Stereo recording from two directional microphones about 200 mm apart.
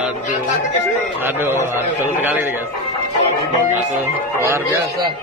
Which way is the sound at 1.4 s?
10° right (ahead or behind).